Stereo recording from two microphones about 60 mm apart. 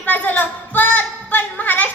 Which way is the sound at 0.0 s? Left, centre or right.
Left.